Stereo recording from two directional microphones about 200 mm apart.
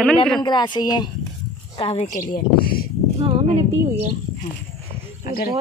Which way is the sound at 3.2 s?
25° right (ahead or behind).